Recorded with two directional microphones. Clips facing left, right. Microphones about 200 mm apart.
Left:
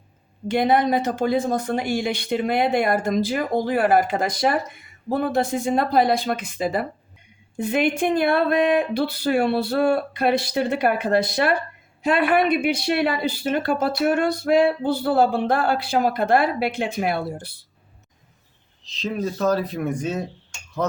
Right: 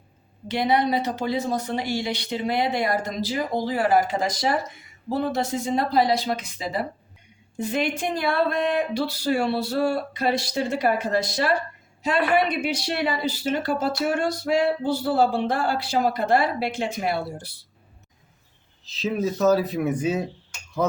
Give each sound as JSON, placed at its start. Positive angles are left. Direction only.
{"t": 0.4, "sound": "a woman's voice", "side_deg": 50}
{"t": 18.9, "sound": "speech", "side_deg": -5}